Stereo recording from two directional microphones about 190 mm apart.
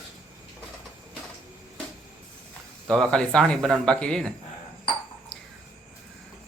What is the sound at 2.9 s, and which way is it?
Speech, 5° left (ahead or behind).